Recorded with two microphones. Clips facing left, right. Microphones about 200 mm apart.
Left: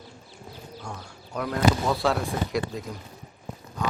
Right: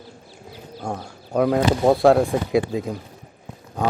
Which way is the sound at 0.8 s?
55° right (ahead or behind).